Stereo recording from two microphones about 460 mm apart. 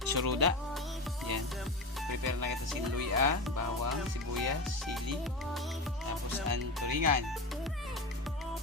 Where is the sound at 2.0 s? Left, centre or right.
Right.